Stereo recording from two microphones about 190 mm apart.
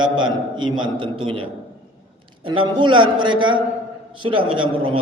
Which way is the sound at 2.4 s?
25° right (ahead or behind).